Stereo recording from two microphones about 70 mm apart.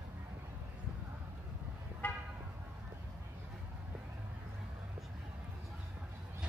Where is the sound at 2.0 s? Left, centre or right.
Left.